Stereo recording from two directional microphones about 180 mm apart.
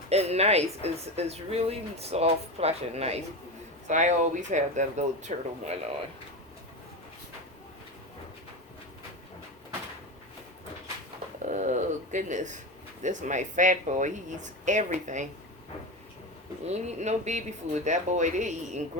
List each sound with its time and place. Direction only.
0.1 s a woman's voice: 35° right (ahead or behind)
11.4 s a woman's voice: 40° right (ahead or behind)
16.6 s a woman's voice: 40° right (ahead or behind)